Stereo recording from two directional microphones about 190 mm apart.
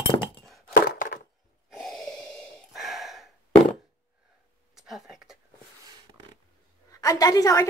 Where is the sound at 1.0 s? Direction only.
45° left (ahead or behind).